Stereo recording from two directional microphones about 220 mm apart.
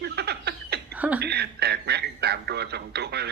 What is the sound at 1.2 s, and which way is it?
A man's voice, 45° right (ahead or behind).